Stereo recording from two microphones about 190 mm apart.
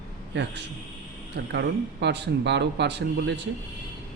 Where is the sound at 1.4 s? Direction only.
65° right (ahead or behind).